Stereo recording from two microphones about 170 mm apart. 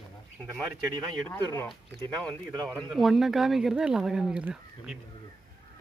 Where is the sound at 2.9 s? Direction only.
Centre (ahead or behind).